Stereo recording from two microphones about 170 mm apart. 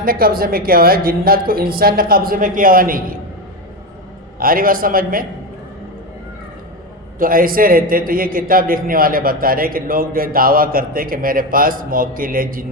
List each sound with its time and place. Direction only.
0.0 s a man's voice: 60° right (ahead or behind)
4.4 s a man's voice: 55° right (ahead or behind)
7.2 s a man's voice: 55° right (ahead or behind)